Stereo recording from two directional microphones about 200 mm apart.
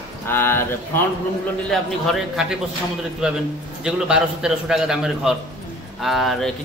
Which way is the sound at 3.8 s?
5° right (ahead or behind).